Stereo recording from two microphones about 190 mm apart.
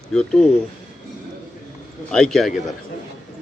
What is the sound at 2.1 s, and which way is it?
Speech, centre (ahead or behind).